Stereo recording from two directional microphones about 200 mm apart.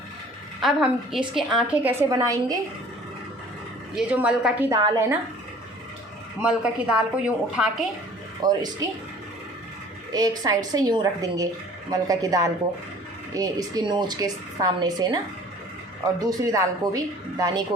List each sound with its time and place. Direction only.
0.6 s a woman's voice: centre (ahead or behind); by 2.6 s 15° right (ahead or behind)
3.9 s a woman's voice: 5° right (ahead or behind)
6.4 s a woman's voice: 5° right (ahead or behind)
8.4 s a woman's voice: 20° right (ahead or behind)
10.1 s a woman's voice: 20° right (ahead or behind)
16.2 s speech: 15° right (ahead or behind)